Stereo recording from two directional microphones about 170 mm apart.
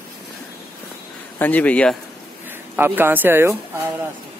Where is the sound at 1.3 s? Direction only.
10° left (ahead or behind).